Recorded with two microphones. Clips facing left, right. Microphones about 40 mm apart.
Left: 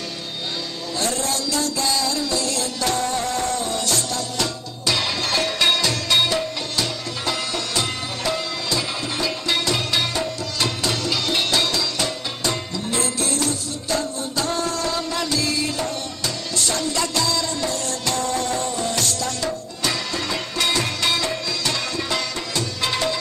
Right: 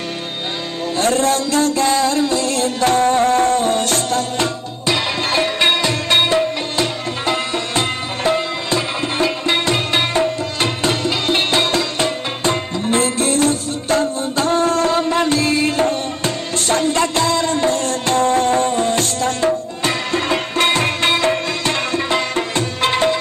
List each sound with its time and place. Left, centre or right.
0.9 s music: right
4.8 s music: right